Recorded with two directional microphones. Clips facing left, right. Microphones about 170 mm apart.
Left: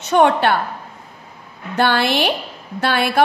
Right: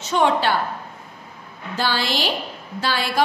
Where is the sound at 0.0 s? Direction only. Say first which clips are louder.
Left 5 dB; 60° left (ahead or behind).